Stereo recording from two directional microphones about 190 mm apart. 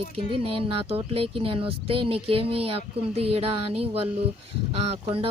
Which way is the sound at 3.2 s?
30° right (ahead or behind).